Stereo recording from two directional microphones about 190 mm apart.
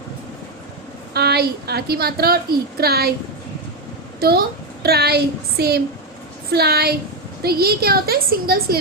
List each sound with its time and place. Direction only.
1.1 s a woman's voice: 55° right (ahead or behind)
4.2 s a woman's voice: 55° right (ahead or behind)